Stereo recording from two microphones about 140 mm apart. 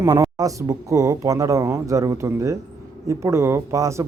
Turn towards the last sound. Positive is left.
turn(degrees=-20)  # may be behind; listen again after turning